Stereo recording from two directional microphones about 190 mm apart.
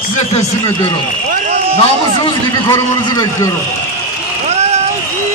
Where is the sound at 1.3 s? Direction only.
35° right (ahead or behind).